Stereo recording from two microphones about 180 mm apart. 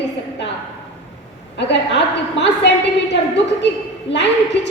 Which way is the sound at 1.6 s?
75° left (ahead or behind).